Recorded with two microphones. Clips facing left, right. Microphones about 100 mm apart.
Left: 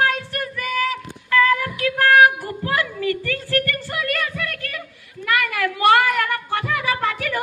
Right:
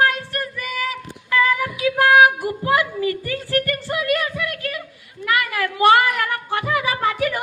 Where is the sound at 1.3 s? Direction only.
15° right (ahead or behind).